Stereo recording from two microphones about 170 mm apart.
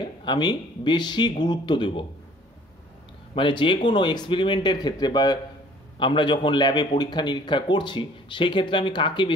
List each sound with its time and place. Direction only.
0.2 s a man's voice: 25° left (ahead or behind)
3.3 s a man's voice: 30° left (ahead or behind)